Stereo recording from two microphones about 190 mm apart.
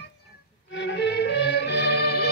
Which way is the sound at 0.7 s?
70° left (ahead or behind).